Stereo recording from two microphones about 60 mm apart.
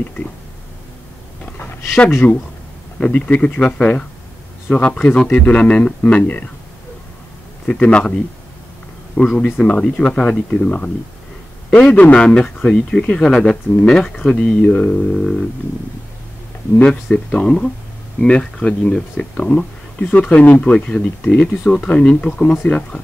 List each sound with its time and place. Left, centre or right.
2.0 s speech: left
3.0 s speech: left
7.6 s speech: centre
11.9 s speech: left
17.1 s speech: centre